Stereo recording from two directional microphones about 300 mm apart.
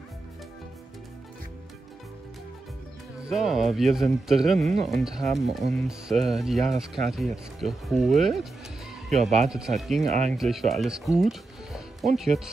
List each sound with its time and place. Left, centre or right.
3.3 s speech: centre
9.5 s speech: centre
10.0 s speech: right
10.3 s speech: centre